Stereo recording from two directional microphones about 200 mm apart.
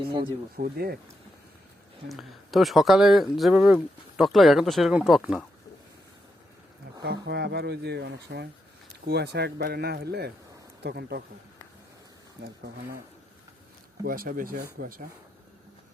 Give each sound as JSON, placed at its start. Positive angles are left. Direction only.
{"t": 0.5, "sound": "speech", "side_deg": -50}
{"t": 2.0, "sound": "speech", "side_deg": 0}
{"t": 7.0, "sound": "speech", "side_deg": -55}
{"t": 14.0, "sound": "speech", "side_deg": -45}